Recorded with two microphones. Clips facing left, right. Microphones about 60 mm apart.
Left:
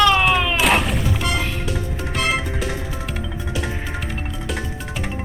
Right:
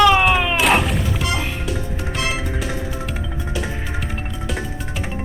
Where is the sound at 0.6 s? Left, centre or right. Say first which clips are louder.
Right 1 dB; centre.